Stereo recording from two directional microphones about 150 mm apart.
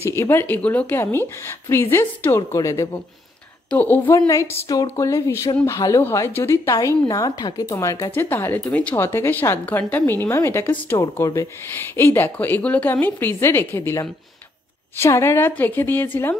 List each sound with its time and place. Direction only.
0.1 s a woman's voice: 15° left (ahead or behind)